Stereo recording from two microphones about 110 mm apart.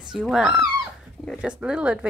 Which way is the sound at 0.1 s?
5° right (ahead or behind).